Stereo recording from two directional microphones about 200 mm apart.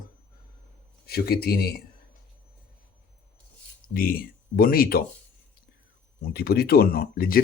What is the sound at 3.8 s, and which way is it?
Speech, 45° left (ahead or behind).